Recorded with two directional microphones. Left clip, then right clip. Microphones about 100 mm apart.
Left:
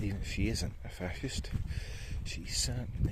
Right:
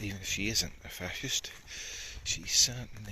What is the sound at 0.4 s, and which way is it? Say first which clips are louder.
Speech: right 4 dB; 40° left (ahead or behind).